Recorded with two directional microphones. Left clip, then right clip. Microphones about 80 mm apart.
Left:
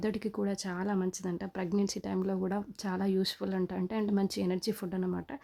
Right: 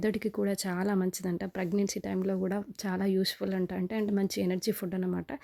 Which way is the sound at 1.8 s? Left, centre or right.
Right.